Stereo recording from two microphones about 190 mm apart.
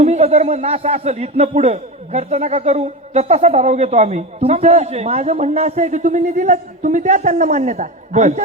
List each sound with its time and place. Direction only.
0.0 s speech: 35° right (ahead or behind)